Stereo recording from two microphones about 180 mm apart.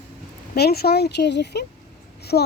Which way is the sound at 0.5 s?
60° left (ahead or behind).